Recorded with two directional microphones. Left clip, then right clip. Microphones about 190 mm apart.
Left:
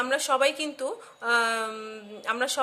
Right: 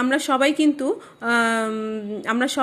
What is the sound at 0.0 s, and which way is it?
A woman's voice, 15° right (ahead or behind).